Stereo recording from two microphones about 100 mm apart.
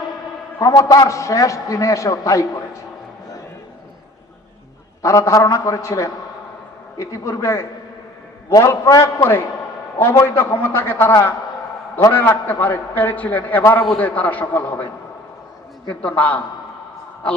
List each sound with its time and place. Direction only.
0.6 s a man's voice: 35° left (ahead or behind)
5.0 s a man's voice: 30° left (ahead or behind)
15.9 s a man's voice: 10° left (ahead or behind)